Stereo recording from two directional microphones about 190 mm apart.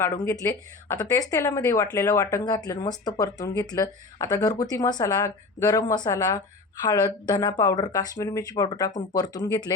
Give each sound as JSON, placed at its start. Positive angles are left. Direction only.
{"t": 0.0, "sound": "speech", "side_deg": 15}